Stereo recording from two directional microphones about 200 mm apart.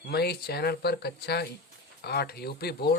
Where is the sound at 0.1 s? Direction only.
50° left (ahead or behind).